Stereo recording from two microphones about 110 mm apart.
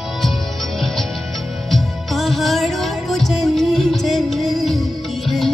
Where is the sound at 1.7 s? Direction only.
Centre (ahead or behind).